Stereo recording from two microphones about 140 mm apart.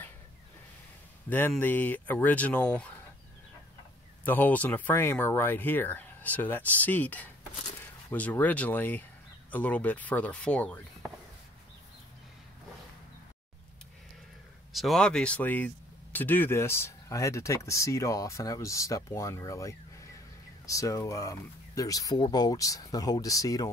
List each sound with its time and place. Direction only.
1.6 s speech: 10° left (ahead or behind)
4.2 s speech: 10° left (ahead or behind)
14.7 s speech: centre (ahead or behind); by 23.7 s 25° left (ahead or behind)